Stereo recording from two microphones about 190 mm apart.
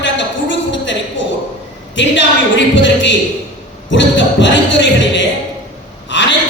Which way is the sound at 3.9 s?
75° left (ahead or behind).